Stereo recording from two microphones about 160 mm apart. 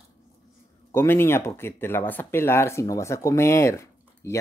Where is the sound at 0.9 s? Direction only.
15° left (ahead or behind).